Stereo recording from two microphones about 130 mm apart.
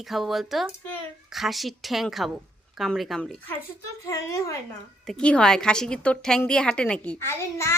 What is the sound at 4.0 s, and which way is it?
Speech, 25° left (ahead or behind).